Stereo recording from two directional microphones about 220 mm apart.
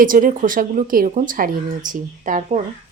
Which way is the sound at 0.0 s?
40° right (ahead or behind).